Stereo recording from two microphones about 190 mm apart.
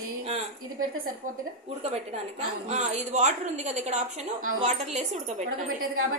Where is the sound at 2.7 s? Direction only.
40° right (ahead or behind).